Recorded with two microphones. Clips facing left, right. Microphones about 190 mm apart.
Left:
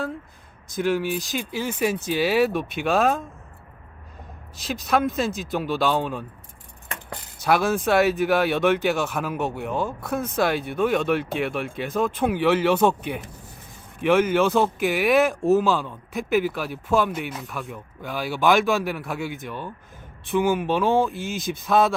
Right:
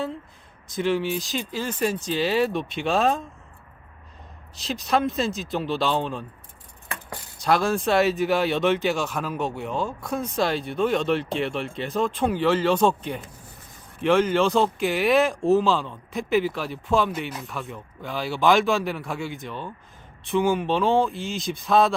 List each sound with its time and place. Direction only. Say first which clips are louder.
0.7 s speech: left 1 dB; 5° left (ahead or behind)
4.6 s speech: left 1 dB; centre (ahead or behind)
7.4 s speech: left 1 dB; 5° left (ahead or behind)
9.0 s speech: left 1 dB; 10° left (ahead or behind)
10.0 s speech: left 2 dB; 5° left (ahead or behind)
14.0 s speech: left 1 dB; 10° left (ahead or behind)